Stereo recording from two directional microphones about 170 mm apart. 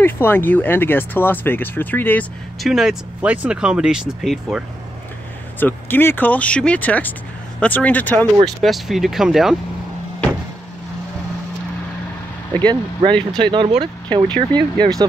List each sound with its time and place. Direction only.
0.0 s speech: 10° left (ahead or behind)
2.6 s speech: centre (ahead or behind)
5.6 s speech: 10° left (ahead or behind)
12.5 s speech: 25° right (ahead or behind)